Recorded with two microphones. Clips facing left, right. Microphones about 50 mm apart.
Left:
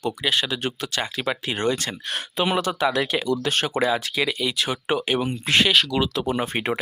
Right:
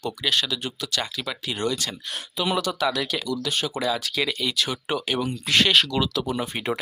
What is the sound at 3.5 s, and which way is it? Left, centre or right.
Speech, left.